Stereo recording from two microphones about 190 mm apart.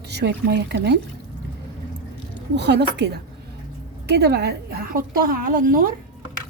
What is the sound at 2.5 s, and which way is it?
A woman's voice, 65° right (ahead or behind).